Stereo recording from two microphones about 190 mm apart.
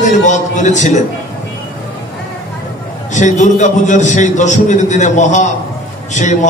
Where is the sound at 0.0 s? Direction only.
40° left (ahead or behind).